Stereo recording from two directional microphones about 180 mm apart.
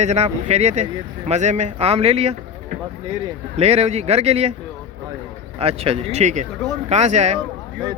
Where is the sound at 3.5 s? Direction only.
35° right (ahead or behind).